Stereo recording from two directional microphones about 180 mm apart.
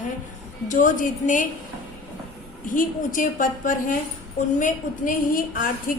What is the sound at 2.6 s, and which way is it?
A woman's voice, 45° left (ahead or behind).